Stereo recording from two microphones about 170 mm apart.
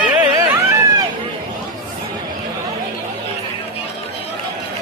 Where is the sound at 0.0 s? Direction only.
10° right (ahead or behind).